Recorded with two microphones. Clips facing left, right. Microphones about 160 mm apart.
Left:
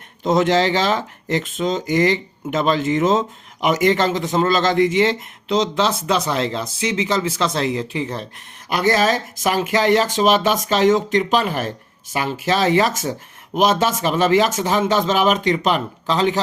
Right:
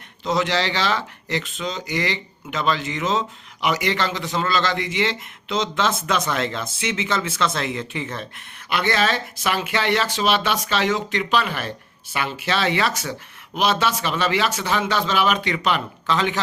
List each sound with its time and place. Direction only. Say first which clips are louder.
0.2 s speech: left 6 dB; 45° left (ahead or behind)